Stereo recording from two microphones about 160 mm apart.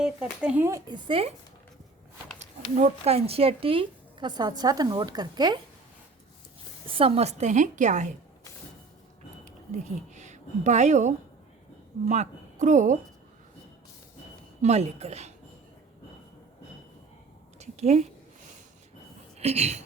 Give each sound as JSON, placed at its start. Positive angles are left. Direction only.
{"t": 0.0, "sound": "speech", "side_deg": -5}
{"t": 0.9, "sound": "speech", "side_deg": -35}
{"t": 2.4, "sound": "speech", "side_deg": -45}
{"t": 6.8, "sound": "a woman's voice", "side_deg": -35}
{"t": 10.2, "sound": "a woman's voice", "side_deg": -50}
{"t": 14.6, "sound": "a woman's voice", "side_deg": -40}
{"t": 17.6, "sound": "a sound", "side_deg": -45}
{"t": 19.4, "sound": "speech", "side_deg": -40}